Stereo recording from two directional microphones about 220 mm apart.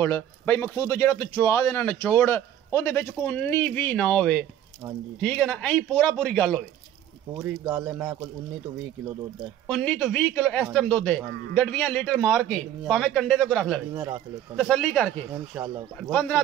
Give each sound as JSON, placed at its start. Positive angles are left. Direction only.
{"t": 0.0, "sound": "a man's voice", "side_deg": 10}
{"t": 7.3, "sound": "speech", "side_deg": -15}
{"t": 9.7, "sound": "a man's voice", "side_deg": 5}
{"t": 13.9, "sound": "speech", "side_deg": -10}
{"t": 14.6, "sound": "a man's voice", "side_deg": 0}
{"t": 15.3, "sound": "speech", "side_deg": -10}
{"t": 16.0, "sound": "a man's voice", "side_deg": 5}